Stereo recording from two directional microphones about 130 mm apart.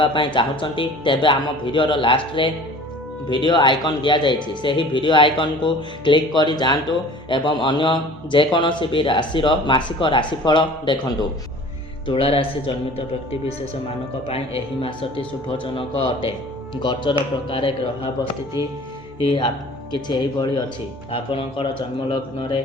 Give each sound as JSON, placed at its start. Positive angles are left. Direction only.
{"t": 0.0, "sound": "speech", "side_deg": 40}
{"t": 19.2, "sound": "speech", "side_deg": 45}
{"t": 19.9, "sound": "speech", "side_deg": 35}